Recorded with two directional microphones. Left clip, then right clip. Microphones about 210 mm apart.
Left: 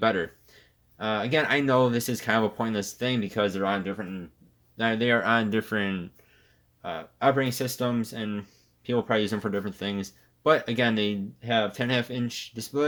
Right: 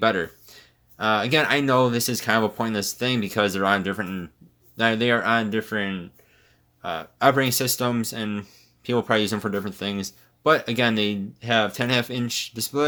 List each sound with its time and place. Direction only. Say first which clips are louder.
0.0 s speech: right 3 dB; 10° right (ahead or behind); by 4.2 s 30° right (ahead or behind)
4.8 s speech: right 3 dB; 15° right (ahead or behind); by 6.1 s 10° left (ahead or behind)
6.8 s speech: right 4 dB; 15° right (ahead or behind)